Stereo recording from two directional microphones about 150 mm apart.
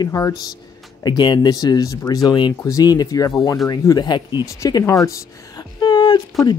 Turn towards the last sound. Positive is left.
turn(degrees=30)  # may be behind; listen again after turning